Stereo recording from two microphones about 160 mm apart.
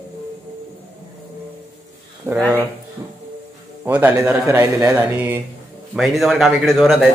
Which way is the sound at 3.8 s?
15° right (ahead or behind).